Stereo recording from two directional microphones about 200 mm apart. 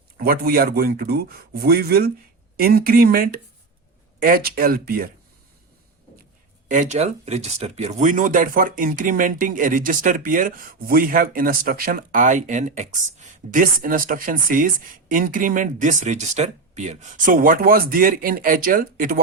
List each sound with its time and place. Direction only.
0.2 s speech: 50° right (ahead or behind)
6.7 s speech: 40° right (ahead or behind)